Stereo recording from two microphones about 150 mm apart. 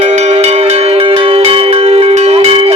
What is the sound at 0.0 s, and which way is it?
Music, 50° right (ahead or behind).